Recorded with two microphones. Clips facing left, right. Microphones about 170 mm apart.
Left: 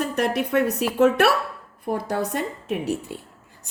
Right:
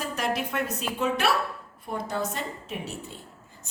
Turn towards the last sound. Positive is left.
turn(degrees=65)  # may be behind; listen again after turning